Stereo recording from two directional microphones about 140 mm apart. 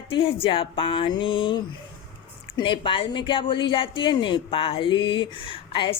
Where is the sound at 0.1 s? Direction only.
40° left (ahead or behind).